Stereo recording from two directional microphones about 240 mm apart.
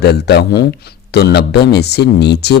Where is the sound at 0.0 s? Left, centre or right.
Left.